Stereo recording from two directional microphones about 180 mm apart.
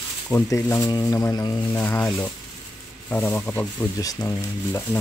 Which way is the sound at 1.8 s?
10° left (ahead or behind).